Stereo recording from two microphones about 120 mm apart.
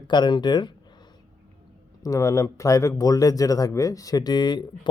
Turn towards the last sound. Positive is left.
turn(degrees=40)  # may be behind; listen again after turning